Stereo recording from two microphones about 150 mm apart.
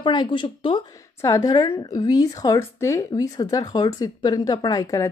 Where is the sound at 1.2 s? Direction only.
20° left (ahead or behind).